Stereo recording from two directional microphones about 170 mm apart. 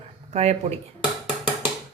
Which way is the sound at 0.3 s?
40° right (ahead or behind).